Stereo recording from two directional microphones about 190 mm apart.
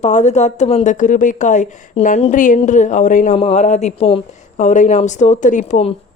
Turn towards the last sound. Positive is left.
turn(degrees=40)  # may be behind; listen again after turning